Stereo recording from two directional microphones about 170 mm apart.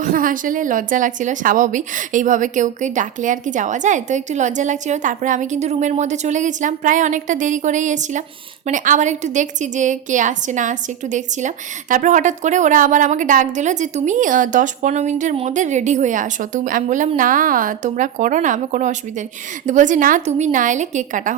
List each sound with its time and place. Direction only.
0.0 s a woman's voice: 55° right (ahead or behind)